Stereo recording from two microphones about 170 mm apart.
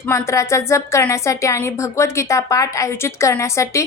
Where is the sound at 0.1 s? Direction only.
15° left (ahead or behind).